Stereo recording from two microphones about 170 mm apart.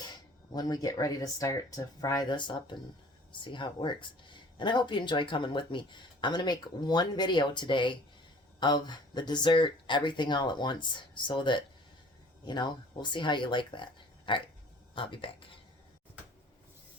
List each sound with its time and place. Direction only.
0.0 s speech: 25° left (ahead or behind)